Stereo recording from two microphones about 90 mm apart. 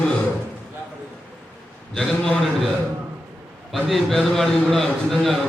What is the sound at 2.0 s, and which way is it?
Mantra, 5° left (ahead or behind).